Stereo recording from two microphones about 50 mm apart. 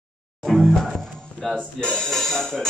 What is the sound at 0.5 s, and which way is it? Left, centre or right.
Music, centre.